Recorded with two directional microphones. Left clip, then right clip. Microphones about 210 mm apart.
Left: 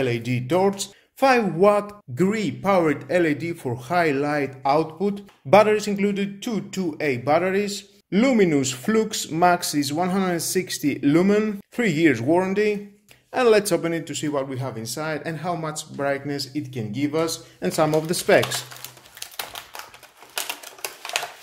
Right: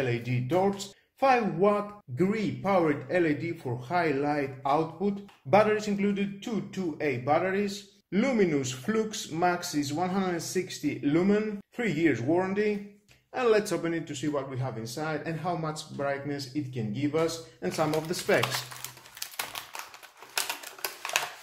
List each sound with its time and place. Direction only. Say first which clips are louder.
0.0 s speech: left 6 dB; 45° left (ahead or behind)
20.3 s typewriter: left 2 dB; centre (ahead or behind)